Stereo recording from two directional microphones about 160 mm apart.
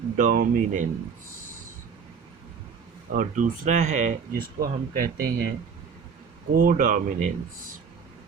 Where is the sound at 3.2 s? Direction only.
55° right (ahead or behind).